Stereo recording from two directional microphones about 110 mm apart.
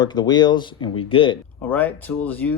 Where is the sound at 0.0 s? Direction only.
40° left (ahead or behind).